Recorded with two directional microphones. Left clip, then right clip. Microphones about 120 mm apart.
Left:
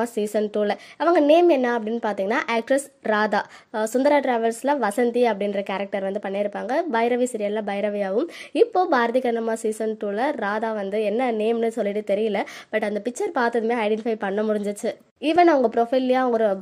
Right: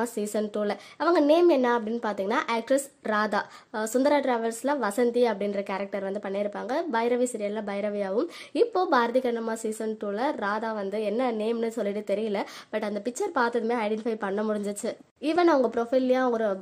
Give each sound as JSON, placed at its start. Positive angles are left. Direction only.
{"t": 0.0, "sound": "a woman's voice", "side_deg": 20}